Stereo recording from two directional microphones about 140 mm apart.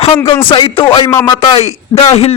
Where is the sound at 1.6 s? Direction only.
50° left (ahead or behind).